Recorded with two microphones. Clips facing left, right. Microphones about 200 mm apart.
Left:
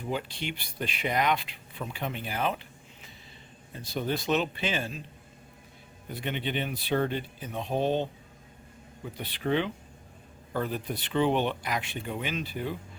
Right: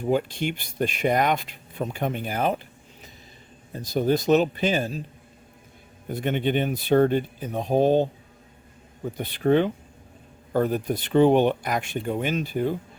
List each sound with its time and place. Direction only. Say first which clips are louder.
0.0 s speech: right 9 dB; 45° right (ahead or behind)
3.7 s a man's voice: right 9 dB; 40° right (ahead or behind)
6.1 s speech: right 9 dB; 50° right (ahead or behind)